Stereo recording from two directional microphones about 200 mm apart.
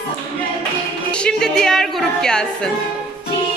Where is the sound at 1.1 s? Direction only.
5° left (ahead or behind).